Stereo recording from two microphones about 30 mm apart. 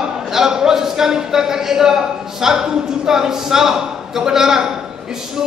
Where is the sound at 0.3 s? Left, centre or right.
Centre.